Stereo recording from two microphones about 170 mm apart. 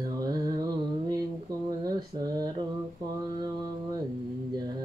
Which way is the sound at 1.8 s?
20° right (ahead or behind).